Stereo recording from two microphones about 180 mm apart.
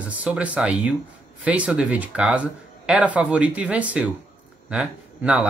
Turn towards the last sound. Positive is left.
turn(degrees=-5)  # may be behind; listen again after turning